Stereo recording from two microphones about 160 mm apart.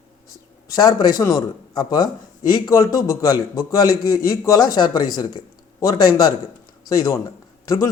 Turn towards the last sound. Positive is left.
turn(degrees=20)  # may be behind; listen again after turning